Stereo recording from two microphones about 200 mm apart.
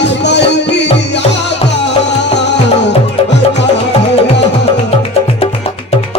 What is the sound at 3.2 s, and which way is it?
Music, 30° left (ahead or behind).